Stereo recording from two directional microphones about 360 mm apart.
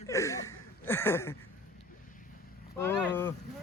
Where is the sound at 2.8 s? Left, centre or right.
Centre.